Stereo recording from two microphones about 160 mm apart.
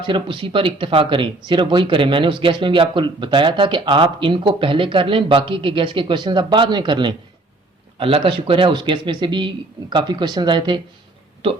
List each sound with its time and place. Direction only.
0.0 s speech: 30° right (ahead or behind)